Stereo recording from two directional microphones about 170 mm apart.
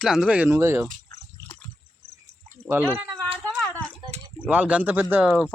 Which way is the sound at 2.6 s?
15° right (ahead or behind).